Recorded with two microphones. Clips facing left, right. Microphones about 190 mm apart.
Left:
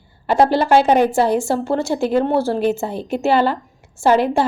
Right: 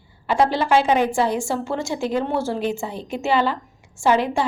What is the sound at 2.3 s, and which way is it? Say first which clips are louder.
Speech: left 5 dB; 35° left (ahead or behind).